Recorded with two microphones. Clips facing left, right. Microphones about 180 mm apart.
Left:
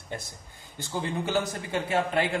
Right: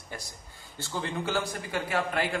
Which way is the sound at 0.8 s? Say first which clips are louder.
Left 2 dB; 15° left (ahead or behind).